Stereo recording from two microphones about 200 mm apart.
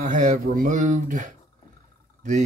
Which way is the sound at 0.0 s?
40° right (ahead or behind).